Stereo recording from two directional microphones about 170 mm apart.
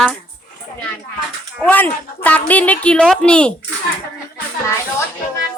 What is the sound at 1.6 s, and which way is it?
Speech, 10° left (ahead or behind).